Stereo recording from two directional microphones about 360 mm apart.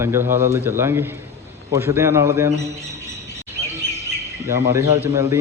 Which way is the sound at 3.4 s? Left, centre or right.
Centre.